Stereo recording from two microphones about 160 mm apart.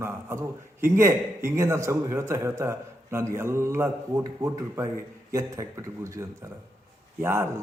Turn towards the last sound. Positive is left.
turn(degrees=-15)  # may be behind; listen again after turning